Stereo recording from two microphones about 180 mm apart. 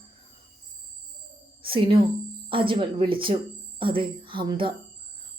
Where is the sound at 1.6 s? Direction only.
30° right (ahead or behind).